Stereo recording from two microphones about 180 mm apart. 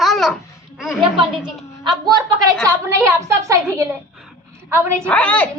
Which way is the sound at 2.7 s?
15° right (ahead or behind).